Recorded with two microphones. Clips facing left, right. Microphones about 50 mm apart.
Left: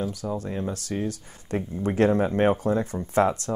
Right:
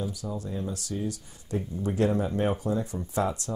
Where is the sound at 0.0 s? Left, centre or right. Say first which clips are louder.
Left 4 dB; left.